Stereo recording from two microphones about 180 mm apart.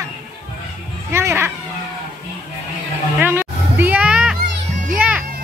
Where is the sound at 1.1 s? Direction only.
15° right (ahead or behind).